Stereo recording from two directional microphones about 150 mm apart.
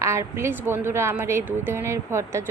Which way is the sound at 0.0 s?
20° right (ahead or behind).